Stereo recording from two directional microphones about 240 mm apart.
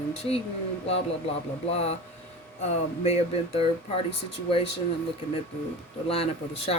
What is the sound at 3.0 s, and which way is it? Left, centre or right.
Speech, left.